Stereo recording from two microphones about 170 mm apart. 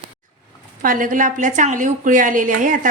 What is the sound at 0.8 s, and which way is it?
Speech, 55° right (ahead or behind).